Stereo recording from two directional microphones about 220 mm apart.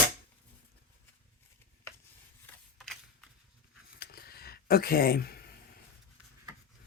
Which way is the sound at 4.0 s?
45° left (ahead or behind).